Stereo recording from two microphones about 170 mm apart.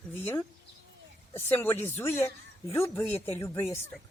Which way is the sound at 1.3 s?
10° left (ahead or behind).